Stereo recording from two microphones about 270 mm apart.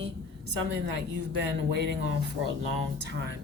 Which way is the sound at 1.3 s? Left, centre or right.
Right.